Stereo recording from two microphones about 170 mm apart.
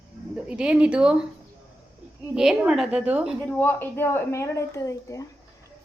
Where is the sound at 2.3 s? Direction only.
5° right (ahead or behind).